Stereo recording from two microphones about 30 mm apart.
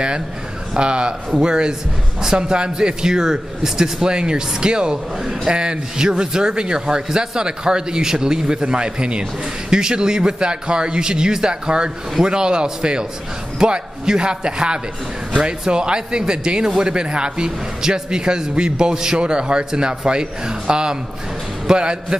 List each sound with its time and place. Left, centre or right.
0.7 s speech: right
4.1 s a man's voice: right